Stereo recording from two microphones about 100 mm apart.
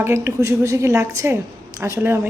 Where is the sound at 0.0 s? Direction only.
30° right (ahead or behind).